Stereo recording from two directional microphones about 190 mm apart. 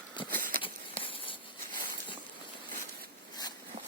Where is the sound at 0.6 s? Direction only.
25° left (ahead or behind).